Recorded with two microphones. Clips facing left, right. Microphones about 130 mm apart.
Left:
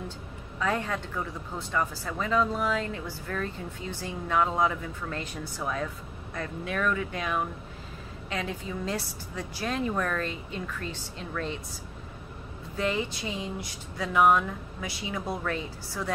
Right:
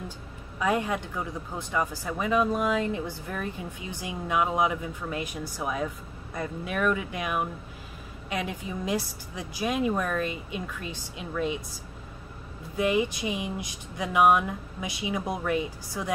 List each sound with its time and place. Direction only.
0.6 s speech: 15° right (ahead or behind)
12.7 s speech: 15° right (ahead or behind)